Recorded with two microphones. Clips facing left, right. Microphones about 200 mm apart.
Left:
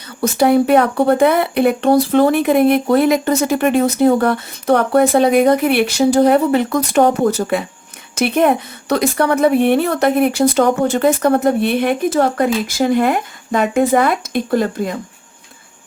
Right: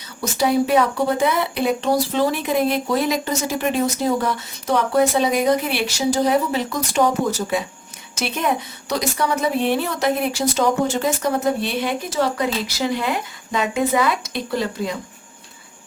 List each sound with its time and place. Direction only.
0.2 s speech: 55° left (ahead or behind)